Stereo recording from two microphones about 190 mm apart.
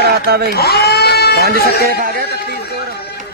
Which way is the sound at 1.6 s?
55° left (ahead or behind).